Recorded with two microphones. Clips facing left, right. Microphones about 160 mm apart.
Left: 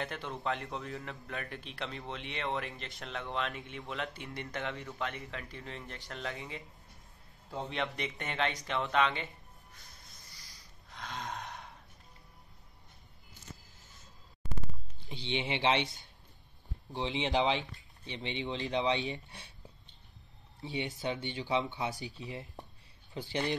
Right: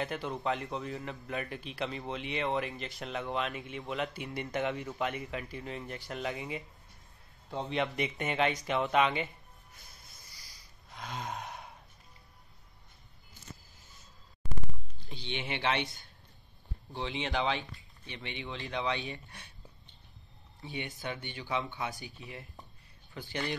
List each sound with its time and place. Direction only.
0.0 s a man's voice: 5° right (ahead or behind)
10.3 s a sound: 5° right (ahead or behind)
15.0 s speech: 25° left (ahead or behind)
21.0 s speech: 20° left (ahead or behind)